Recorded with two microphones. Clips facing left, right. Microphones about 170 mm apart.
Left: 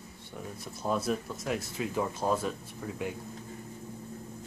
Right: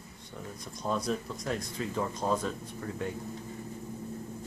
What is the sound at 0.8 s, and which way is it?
Speech, 5° left (ahead or behind).